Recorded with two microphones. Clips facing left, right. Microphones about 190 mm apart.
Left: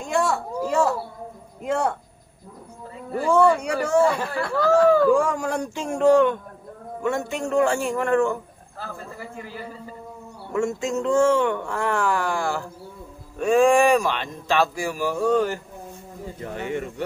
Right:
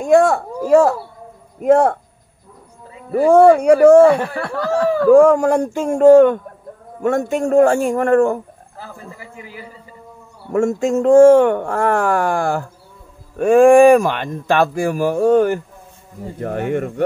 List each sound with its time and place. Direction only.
0.0 s speech: 50° right (ahead or behind)
3.3 s speech: 55° right (ahead or behind)
10.5 s speech: 50° right (ahead or behind)